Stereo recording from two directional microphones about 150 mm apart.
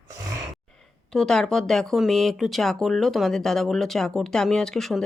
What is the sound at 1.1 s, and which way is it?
Speech, 5° left (ahead or behind).